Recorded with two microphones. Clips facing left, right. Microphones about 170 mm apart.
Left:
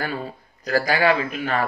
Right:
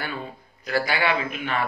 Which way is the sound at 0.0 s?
40° left (ahead or behind).